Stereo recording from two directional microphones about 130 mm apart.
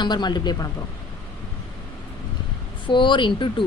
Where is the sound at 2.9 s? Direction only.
40° left (ahead or behind).